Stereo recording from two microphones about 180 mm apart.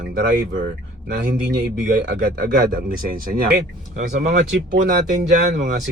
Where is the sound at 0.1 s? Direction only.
60° right (ahead or behind).